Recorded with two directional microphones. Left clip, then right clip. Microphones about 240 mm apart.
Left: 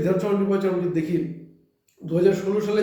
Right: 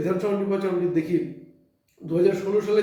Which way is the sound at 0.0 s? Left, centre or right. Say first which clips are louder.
Left 2 dB; centre.